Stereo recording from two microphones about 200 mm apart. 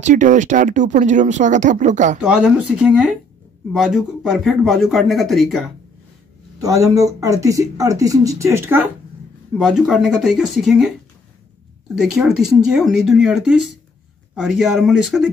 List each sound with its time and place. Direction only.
0.0 s speech: 40° right (ahead or behind)
2.2 s speech: 5° right (ahead or behind)
6.6 s speech: 15° right (ahead or behind)
11.9 s speech: 5° right (ahead or behind)